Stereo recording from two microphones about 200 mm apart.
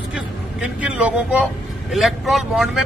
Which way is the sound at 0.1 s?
5° right (ahead or behind).